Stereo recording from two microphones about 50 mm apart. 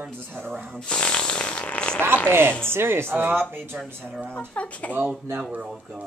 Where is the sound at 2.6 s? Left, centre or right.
Right.